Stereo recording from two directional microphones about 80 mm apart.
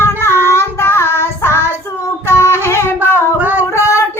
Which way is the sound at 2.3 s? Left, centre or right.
Left.